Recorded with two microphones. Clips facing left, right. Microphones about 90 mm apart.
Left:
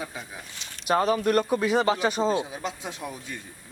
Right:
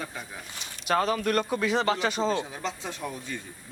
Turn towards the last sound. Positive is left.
turn(degrees=10)  # may be behind; listen again after turning